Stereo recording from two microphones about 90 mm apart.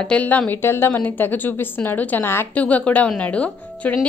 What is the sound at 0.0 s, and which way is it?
Speech, 15° left (ahead or behind).